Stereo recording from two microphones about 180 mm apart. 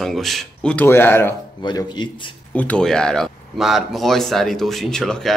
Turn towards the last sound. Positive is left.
turn(degrees=0)  # may be behind; listen again after turning